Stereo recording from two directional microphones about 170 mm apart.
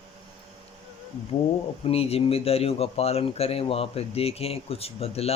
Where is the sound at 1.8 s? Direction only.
35° left (ahead or behind).